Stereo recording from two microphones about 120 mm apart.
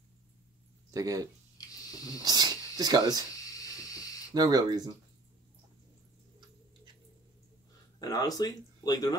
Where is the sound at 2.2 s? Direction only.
35° right (ahead or behind).